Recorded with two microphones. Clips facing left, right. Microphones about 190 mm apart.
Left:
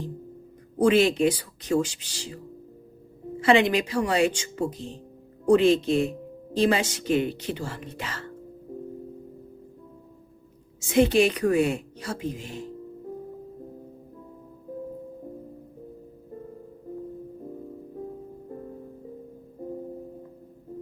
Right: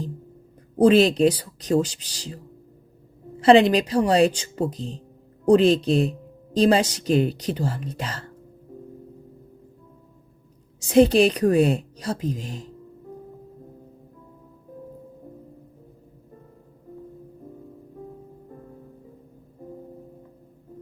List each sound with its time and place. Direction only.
0.8 s a woman's voice: 35° right (ahead or behind)
3.4 s a woman's voice: 35° right (ahead or behind)
10.8 s a woman's voice: 35° right (ahead or behind)